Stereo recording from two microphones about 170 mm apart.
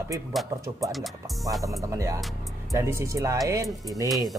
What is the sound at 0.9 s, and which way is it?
Speech, centre (ahead or behind).